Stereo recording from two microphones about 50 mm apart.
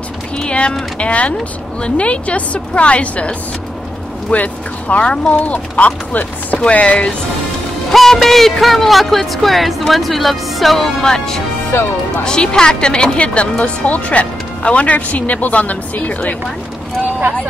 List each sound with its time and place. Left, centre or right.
0.4 s run: centre
0.9 s speech: left
5.5 s chopping: left
6.6 s speech: left
7.9 s speech: centre
11.7 s speech: left
12.2 s speech: centre; by 16.3 s left